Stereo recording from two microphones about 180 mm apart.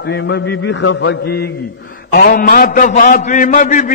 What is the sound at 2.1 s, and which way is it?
A man's voice, 60° left (ahead or behind).